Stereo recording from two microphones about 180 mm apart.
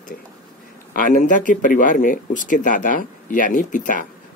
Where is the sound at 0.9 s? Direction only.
45° left (ahead or behind).